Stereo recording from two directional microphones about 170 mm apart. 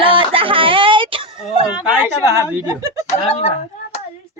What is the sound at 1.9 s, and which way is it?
A woman's voice, 15° right (ahead or behind).